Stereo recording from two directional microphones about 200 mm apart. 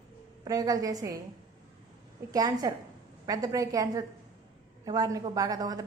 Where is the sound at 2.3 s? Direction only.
20° right (ahead or behind).